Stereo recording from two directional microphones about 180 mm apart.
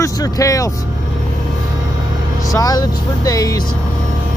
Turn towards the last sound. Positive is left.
turn(degrees=20)  # may be behind; listen again after turning